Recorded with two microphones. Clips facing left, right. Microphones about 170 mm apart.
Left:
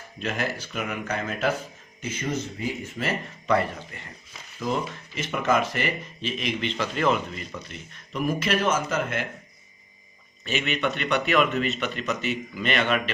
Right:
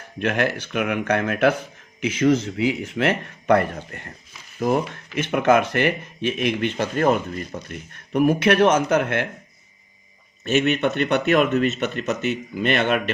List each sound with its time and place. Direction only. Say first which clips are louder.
0.2 s speech: right 7 dB; 65° right (ahead or behind)
2.0 s speech: right 11 dB; 90° right; by 9.3 s 65° right (ahead or behind)
10.4 s speech: right 7 dB; 50° right (ahead or behind)